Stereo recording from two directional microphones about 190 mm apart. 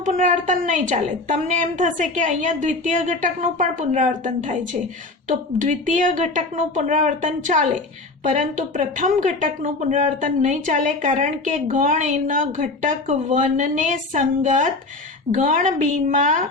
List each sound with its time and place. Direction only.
0.0 s a woman's voice: 40° right (ahead or behind)